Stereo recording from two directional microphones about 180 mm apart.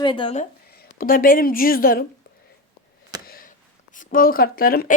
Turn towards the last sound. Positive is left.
turn(degrees=55)  # may be behind; listen again after turning